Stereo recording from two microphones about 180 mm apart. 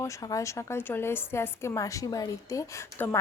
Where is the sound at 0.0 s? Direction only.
20° left (ahead or behind).